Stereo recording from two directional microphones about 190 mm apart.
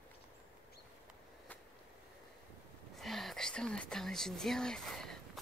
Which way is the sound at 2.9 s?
Centre (ahead or behind).